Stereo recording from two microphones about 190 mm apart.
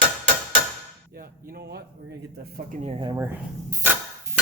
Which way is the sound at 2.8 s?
25° right (ahead or behind).